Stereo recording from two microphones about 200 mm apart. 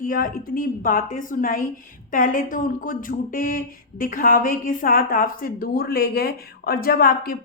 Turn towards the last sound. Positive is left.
turn(degrees=45)  # may be behind; listen again after turning